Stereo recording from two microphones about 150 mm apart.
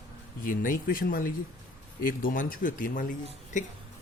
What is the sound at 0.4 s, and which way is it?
Speech, 65° left (ahead or behind).